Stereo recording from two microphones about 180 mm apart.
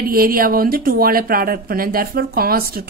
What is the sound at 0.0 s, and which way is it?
A woman's voice, 55° right (ahead or behind).